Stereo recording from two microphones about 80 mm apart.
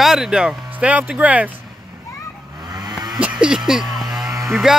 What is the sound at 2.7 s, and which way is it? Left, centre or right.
Vehicle, right.